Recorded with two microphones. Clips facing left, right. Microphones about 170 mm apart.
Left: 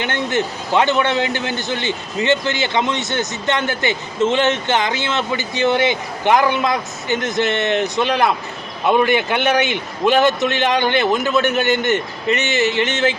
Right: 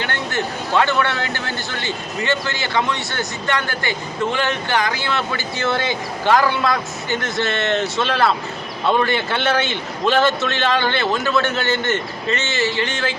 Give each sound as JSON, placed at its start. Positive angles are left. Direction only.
{"t": 0.0, "sound": "a man's voice", "side_deg": 20}